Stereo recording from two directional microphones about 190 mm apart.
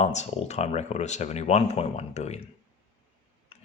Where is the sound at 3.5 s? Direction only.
30° left (ahead or behind).